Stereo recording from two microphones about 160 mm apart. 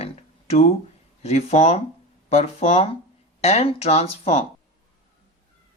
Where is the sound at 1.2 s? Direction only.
45° left (ahead or behind).